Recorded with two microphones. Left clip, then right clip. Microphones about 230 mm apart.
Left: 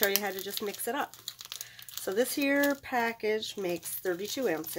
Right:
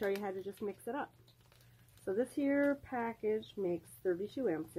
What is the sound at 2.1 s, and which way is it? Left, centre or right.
Speech, centre.